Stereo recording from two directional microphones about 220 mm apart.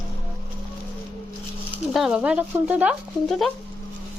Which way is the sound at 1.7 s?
Centre (ahead or behind).